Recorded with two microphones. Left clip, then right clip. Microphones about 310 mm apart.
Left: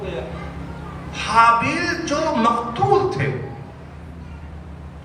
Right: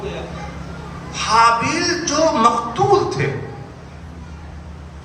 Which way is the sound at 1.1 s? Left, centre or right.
Centre.